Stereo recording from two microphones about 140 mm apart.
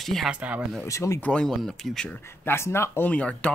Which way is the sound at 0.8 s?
20° left (ahead or behind).